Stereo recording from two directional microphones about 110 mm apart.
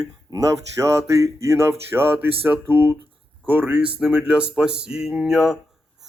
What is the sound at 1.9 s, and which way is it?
Speech, 20° right (ahead or behind).